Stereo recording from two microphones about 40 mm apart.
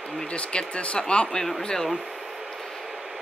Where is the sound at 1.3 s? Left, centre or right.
Centre.